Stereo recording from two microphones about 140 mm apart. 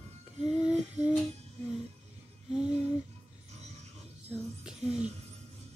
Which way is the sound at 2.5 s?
5° right (ahead or behind).